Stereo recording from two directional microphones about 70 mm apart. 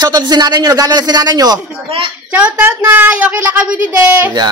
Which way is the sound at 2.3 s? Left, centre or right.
Right.